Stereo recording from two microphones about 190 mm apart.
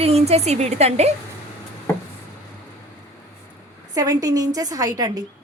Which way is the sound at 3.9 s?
20° right (ahead or behind).